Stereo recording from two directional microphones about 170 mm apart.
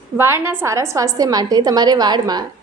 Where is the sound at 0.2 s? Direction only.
15° right (ahead or behind).